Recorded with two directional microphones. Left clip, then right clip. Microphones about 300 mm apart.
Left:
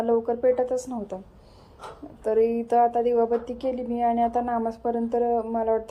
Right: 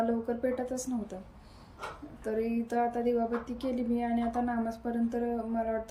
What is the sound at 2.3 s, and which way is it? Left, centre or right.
A woman's voice, centre.